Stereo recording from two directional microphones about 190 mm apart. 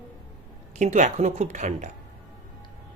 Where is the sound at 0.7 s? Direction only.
35° right (ahead or behind).